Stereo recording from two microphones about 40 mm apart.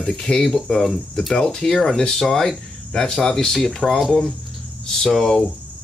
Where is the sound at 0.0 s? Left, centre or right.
Centre.